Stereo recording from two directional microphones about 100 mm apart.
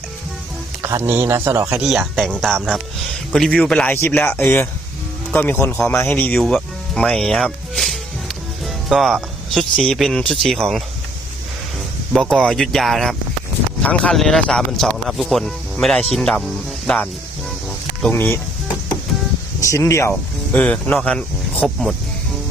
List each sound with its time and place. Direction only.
0.8 s music: 35° right (ahead or behind)
1.0 s speech: 20° right (ahead or behind)
1.8 s speech: centre (ahead or behind)
4.3 s speech: 25° left (ahead or behind)
6.4 s music: 5° left (ahead or behind)
10.4 s speech: 5° left (ahead or behind)
12.1 s speech: 5° left (ahead or behind)
16.4 s music: 5° left (ahead or behind)
18.1 s speech: 25° left (ahead or behind)
19.6 s speech: 30° left (ahead or behind); by 21.8 s 10° left (ahead or behind)